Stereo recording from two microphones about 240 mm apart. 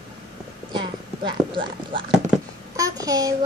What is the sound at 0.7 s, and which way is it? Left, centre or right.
Clip-clop, centre.